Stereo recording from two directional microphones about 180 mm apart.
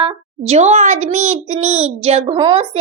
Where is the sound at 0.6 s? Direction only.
40° right (ahead or behind).